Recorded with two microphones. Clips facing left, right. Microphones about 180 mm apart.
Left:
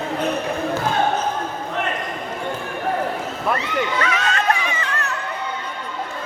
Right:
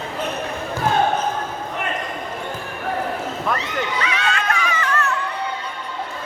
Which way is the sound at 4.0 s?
40° left (ahead or behind).